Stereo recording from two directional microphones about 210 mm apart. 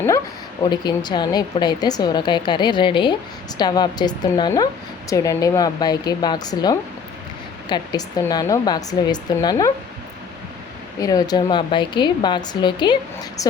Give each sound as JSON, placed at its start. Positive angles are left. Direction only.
{"t": 0.6, "sound": "a woman's voice", "side_deg": 20}
{"t": 11.0, "sound": "a woman's voice", "side_deg": 15}